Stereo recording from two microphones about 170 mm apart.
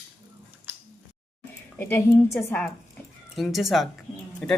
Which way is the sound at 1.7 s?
10° left (ahead or behind).